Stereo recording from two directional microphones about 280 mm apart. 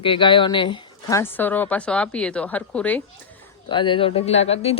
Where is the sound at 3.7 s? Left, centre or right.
Centre.